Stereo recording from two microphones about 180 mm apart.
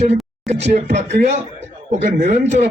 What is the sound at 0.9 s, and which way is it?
A man's voice, 40° right (ahead or behind).